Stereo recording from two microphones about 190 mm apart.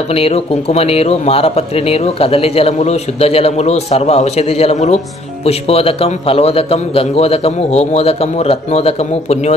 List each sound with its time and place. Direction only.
0.1 s speech: 30° left (ahead or behind)